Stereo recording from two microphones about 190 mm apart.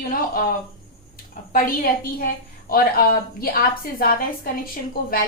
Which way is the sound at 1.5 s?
50° left (ahead or behind).